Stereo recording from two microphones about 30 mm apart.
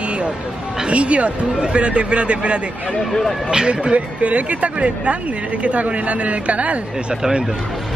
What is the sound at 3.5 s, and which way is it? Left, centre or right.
Speech, right.